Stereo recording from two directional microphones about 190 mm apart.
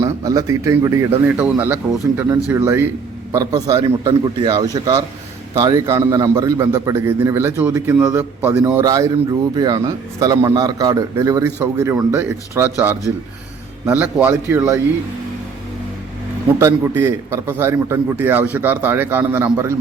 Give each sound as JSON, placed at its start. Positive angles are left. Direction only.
{"t": 0.0, "sound": "a man's voice", "side_deg": -20}
{"t": 16.6, "sound": "a man's voice", "side_deg": -15}